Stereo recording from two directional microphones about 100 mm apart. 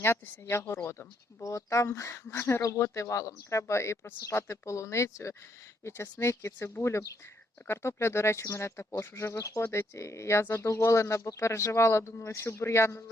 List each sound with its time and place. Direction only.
0.0 s speech: 25° left (ahead or behind)